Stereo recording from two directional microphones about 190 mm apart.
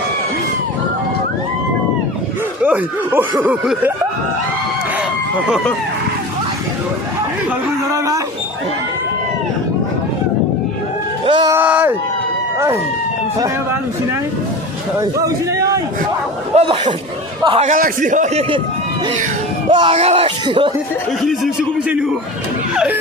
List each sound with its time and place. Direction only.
2.6 s speech: 10° right (ahead or behind)
7.9 s speech: 15° right (ahead or behind)
11.3 s speech: 25° right (ahead or behind)
11.5 s a sound: 10° right (ahead or behind)
12.5 s speech: 15° right (ahead or behind)
16.6 s a man's voice: 35° right (ahead or behind)
19.7 s speech: 30° right (ahead or behind)
21.2 s speech: 5° right (ahead or behind)